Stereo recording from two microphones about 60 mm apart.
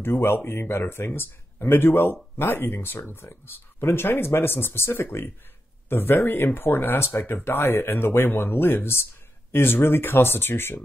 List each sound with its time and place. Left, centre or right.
0.0 s speech: left